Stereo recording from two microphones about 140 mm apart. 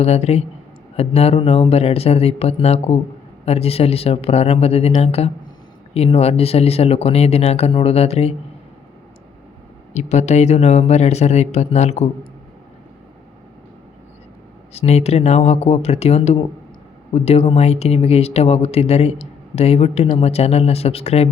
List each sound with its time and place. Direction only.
0.0 s speech: 50° left (ahead or behind)
9.9 s speech: 55° left (ahead or behind)
14.7 s speech: 50° left (ahead or behind)